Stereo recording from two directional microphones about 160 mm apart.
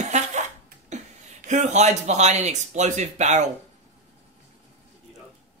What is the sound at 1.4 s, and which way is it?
Speech, 50° right (ahead or behind).